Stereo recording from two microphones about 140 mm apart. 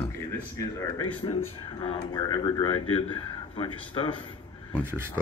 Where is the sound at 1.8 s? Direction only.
35° left (ahead or behind).